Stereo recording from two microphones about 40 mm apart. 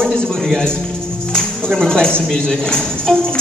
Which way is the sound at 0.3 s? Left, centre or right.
Centre.